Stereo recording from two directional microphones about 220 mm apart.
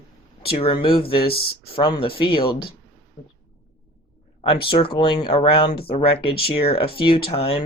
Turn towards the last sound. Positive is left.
turn(degrees=25)  # may be behind; listen again after turning